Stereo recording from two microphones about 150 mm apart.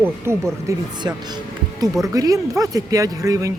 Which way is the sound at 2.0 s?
25° right (ahead or behind).